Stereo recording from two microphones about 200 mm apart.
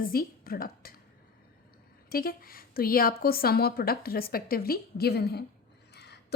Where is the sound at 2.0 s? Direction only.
45° left (ahead or behind).